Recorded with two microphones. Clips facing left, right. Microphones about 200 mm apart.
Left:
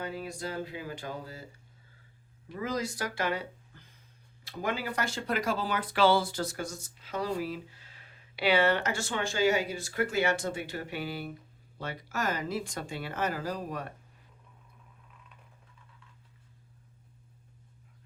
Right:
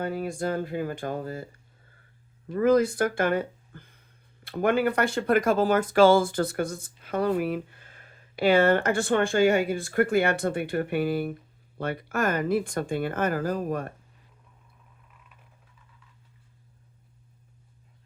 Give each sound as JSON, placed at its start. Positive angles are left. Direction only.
{"t": 0.0, "sound": "speech", "side_deg": -50}
{"t": 2.5, "sound": "speech", "side_deg": -55}